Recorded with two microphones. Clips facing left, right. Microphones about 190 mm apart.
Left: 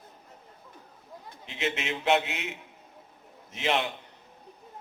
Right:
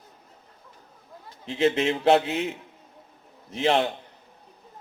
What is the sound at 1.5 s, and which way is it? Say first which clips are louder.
Speech: right 10 dB; 35° right (ahead or behind).